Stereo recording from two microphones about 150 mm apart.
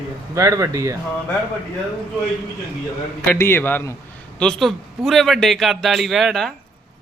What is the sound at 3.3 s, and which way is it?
A man's voice, 15° left (ahead or behind).